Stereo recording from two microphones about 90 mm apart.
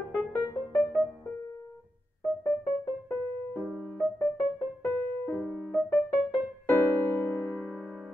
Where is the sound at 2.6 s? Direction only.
25° left (ahead or behind).